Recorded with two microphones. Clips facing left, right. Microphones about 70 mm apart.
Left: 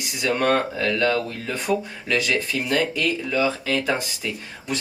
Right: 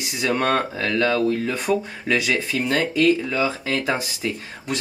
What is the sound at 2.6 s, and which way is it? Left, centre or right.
Speech, centre.